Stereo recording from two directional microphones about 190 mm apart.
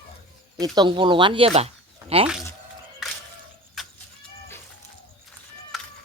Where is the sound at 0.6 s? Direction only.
25° right (ahead or behind).